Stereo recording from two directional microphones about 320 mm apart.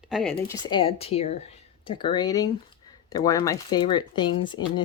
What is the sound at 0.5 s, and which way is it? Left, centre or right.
Speech, centre.